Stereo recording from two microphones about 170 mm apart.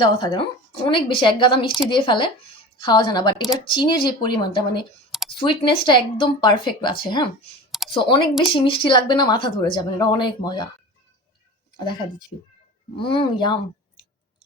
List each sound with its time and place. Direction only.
0.0 s a woman's voice: 25° left (ahead or behind)
13.0 s a woman's voice: 30° left (ahead or behind)